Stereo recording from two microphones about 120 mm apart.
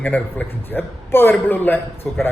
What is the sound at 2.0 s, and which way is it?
Speech, 5° left (ahead or behind).